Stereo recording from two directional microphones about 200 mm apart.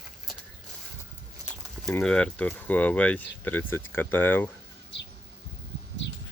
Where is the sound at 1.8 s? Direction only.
5° left (ahead or behind).